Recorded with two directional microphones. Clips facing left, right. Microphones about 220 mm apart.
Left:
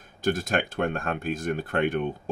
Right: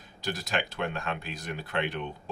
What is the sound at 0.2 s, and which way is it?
Speech, 50° left (ahead or behind).